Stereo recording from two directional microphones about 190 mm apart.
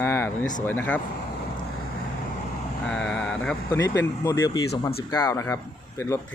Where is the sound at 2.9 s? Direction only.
5° left (ahead or behind).